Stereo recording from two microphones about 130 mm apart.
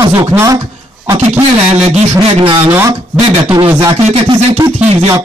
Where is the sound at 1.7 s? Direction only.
50° right (ahead or behind).